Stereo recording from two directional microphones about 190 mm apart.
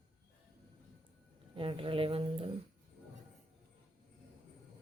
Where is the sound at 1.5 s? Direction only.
30° right (ahead or behind).